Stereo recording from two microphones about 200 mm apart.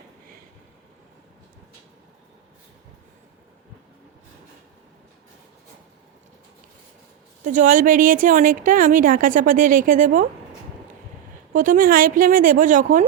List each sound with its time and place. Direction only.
7.4 s a woman's voice: 40° right (ahead or behind)
11.5 s a woman's voice: 40° right (ahead or behind)